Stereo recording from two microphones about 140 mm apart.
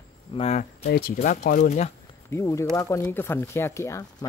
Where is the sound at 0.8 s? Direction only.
90° left.